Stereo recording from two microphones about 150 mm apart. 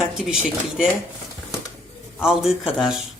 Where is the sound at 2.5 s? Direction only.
5° right (ahead or behind).